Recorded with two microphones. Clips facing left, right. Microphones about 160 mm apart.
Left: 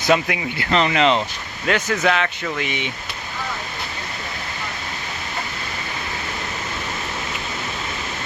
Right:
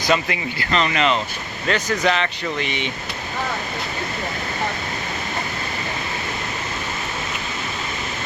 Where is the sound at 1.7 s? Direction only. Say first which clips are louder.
Left 1 dB; 5° left (ahead or behind).